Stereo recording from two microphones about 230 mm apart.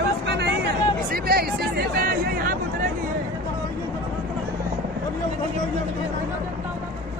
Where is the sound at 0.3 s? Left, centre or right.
Right.